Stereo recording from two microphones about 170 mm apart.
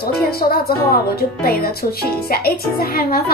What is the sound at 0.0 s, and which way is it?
Speech, 65° left (ahead or behind).